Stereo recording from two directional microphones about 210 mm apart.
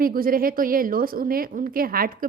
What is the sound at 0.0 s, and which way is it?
A woman's voice, 45° right (ahead or behind).